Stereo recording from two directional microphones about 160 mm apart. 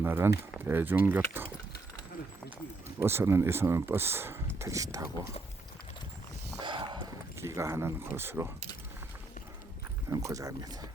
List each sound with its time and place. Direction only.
0.0 s speech: 15° right (ahead or behind)
3.0 s speech: 15° right (ahead or behind)
6.6 s a sound: 30° right (ahead or behind)
7.3 s speech: 15° right (ahead or behind)
10.1 s speech: 20° right (ahead or behind)